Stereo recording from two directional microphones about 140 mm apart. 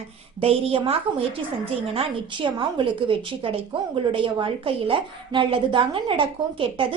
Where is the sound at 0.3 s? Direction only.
45° right (ahead or behind).